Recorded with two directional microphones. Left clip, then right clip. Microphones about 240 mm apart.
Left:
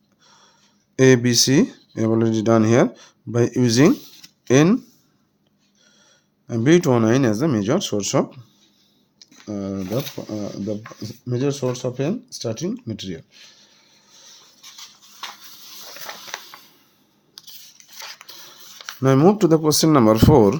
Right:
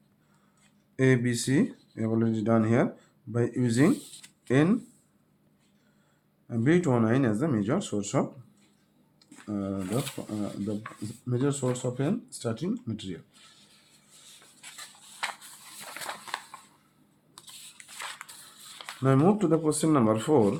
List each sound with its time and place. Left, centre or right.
0.9 s speech: left
6.5 s speech: left
9.5 s speech: left
17.3 s rub: centre
19.0 s speech: left